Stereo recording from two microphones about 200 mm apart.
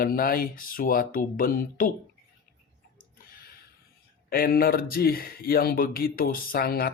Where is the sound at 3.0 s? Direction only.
45° left (ahead or behind).